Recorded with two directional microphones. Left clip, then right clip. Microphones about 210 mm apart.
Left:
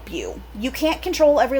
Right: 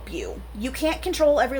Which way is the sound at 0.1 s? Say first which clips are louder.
Left 3 dB; 25° left (ahead or behind).